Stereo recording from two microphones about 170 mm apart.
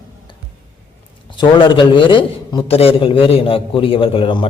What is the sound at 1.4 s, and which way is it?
A man's voice, 25° left (ahead or behind).